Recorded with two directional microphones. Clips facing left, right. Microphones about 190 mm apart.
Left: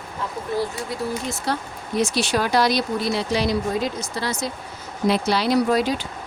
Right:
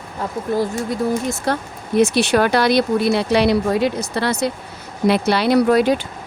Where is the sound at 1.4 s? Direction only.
55° right (ahead or behind).